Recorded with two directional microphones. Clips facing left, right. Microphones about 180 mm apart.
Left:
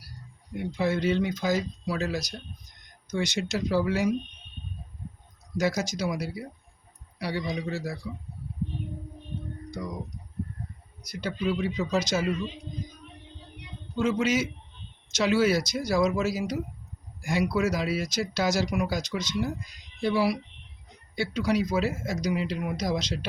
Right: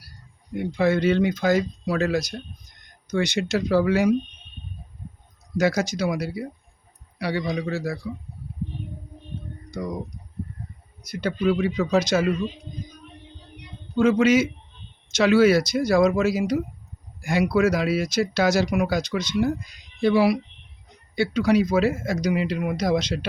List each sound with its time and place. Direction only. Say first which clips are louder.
0.8 s speech: right 6 dB; 65° right (ahead or behind)
5.5 s speech: right 5 dB; 65° right (ahead or behind)
11.0 s speech: right 6 dB; 60° right (ahead or behind)
13.9 s speech: right 7 dB; 60° right (ahead or behind)